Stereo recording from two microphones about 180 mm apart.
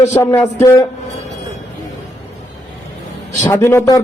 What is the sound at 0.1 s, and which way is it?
Speech, 15° left (ahead or behind).